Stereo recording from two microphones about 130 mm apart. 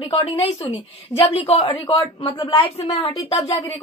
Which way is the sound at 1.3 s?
45° left (ahead or behind).